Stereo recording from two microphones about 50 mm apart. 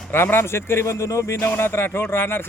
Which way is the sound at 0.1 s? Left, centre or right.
Left.